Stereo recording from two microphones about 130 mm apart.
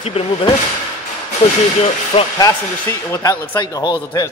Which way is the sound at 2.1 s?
50° left (ahead or behind).